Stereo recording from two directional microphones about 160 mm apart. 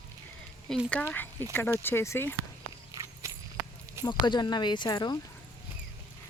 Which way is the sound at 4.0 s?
25° left (ahead or behind).